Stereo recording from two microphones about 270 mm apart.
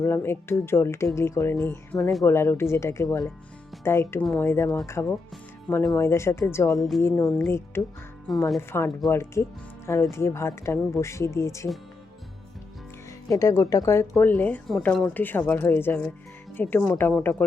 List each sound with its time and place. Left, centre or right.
0.0 s speech: centre
13.2 s speech: centre